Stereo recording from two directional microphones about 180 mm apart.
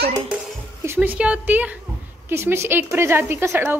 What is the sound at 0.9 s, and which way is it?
Speech, 10° right (ahead or behind).